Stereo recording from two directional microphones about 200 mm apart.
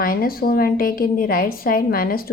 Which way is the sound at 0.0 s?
45° left (ahead or behind).